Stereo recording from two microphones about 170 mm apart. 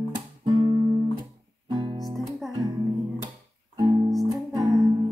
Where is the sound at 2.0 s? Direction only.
Centre (ahead or behind).